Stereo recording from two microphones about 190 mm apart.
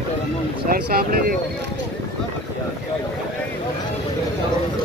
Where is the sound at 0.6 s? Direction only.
50° right (ahead or behind).